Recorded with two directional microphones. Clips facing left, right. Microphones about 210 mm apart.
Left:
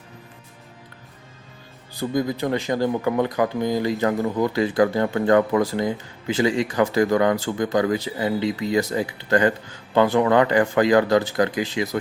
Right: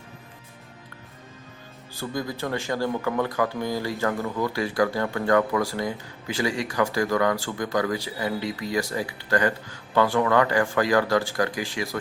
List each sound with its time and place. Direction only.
1.9 s speech: 20° left (ahead or behind)